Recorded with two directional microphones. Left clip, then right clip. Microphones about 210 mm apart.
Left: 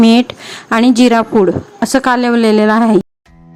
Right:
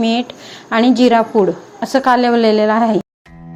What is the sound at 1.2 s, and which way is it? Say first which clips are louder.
A woman's voice: left 2 dB; 30° left (ahead or behind).